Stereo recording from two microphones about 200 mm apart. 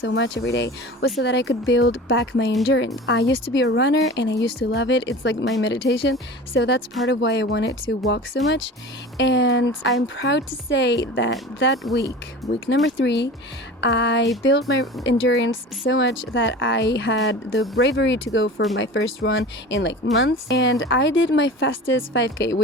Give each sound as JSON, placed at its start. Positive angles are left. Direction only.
{"t": 0.0, "sound": "speech", "side_deg": 65}